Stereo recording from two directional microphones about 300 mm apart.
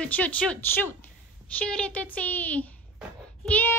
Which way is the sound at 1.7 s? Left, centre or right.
Centre.